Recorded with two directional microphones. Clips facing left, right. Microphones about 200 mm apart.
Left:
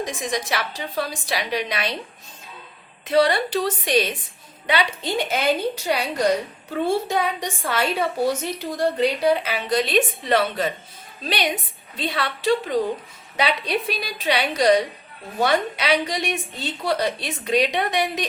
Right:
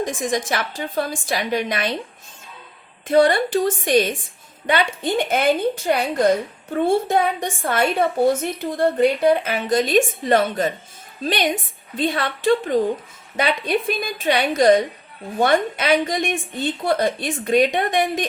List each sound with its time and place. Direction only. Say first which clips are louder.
0.0 s a woman's voice: right 4 dB; 50° right (ahead or behind)
3.1 s a woman's voice: right 3 dB; 50° right (ahead or behind)